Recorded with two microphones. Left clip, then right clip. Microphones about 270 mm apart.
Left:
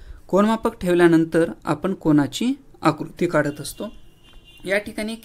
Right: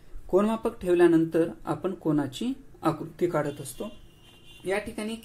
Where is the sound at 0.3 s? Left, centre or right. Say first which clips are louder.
Left 6 dB; left.